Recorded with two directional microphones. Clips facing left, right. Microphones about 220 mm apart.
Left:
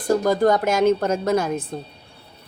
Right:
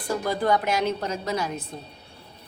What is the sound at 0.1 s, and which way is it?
Speech, 45° left (ahead or behind).